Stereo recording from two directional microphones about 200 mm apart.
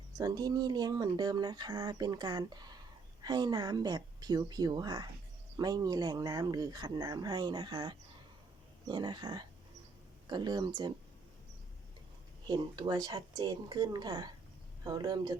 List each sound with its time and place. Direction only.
0.2 s speech: 20° right (ahead or behind)
12.5 s speech: 20° right (ahead or behind)